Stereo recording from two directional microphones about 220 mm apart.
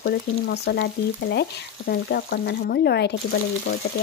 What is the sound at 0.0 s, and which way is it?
Speech, 50° left (ahead or behind).